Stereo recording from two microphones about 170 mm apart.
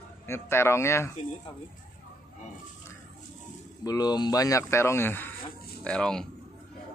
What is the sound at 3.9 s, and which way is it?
Speech, 25° left (ahead or behind).